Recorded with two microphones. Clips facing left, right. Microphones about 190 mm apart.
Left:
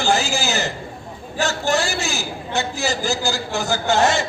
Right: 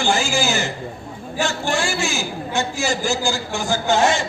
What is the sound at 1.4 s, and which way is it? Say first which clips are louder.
A man's voice: left 2 dB; 40° left (ahead or behind).